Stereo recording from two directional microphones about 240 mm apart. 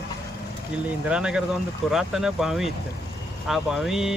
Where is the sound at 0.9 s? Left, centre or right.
Centre.